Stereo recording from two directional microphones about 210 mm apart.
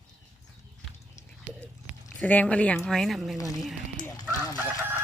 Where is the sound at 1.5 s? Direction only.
5° left (ahead or behind).